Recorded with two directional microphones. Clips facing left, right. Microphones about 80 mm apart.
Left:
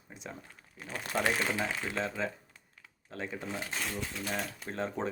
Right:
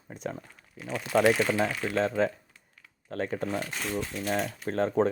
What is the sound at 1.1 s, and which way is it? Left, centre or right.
Speech, right.